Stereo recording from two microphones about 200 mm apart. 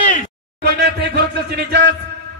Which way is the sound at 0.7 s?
55° right (ahead or behind).